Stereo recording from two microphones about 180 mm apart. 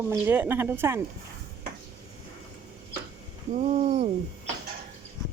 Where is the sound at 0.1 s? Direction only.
10° right (ahead or behind).